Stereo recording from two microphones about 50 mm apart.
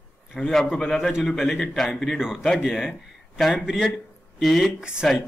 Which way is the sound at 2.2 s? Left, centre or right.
Centre.